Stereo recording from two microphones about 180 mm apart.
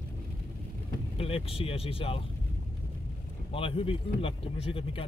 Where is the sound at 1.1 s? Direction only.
30° left (ahead or behind).